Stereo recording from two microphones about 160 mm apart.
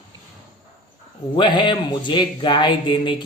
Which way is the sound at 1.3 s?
30° left (ahead or behind).